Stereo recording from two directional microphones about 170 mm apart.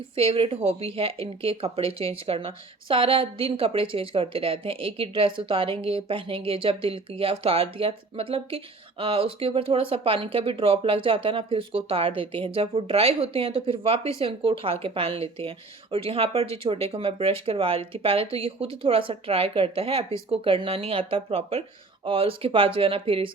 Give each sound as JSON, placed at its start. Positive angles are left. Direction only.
{"t": 0.2, "sound": "a woman's voice", "side_deg": -35}